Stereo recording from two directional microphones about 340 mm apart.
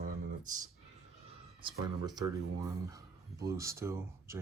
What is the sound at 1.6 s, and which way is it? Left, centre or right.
Speech, centre.